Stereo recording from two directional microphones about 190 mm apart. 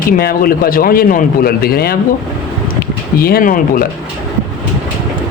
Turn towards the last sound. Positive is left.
turn(degrees=50)  # may be behind; listen again after turning